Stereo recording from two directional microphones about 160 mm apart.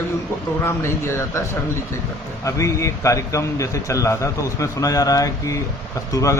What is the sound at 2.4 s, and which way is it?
A man's voice, 20° left (ahead or behind).